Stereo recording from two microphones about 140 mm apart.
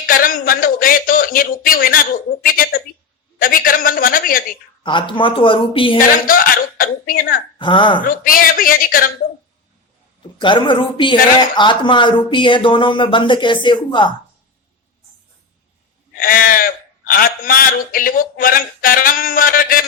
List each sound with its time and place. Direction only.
0.1 s a man's voice: 85° left
4.8 s speech: 35° left (ahead or behind)
6.0 s speech: 85° left
7.6 s speech: 35° left (ahead or behind)
8.0 s speech: 85° left
10.4 s speech: 35° left (ahead or behind)
16.1 s speech: 90° left